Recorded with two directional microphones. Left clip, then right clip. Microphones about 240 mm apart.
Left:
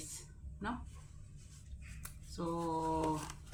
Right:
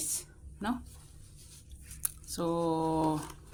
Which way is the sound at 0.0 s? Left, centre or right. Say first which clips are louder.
Right 11 dB; right.